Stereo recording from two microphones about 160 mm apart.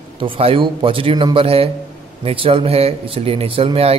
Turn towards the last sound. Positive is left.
turn(degrees=-40)  # may be behind; listen again after turning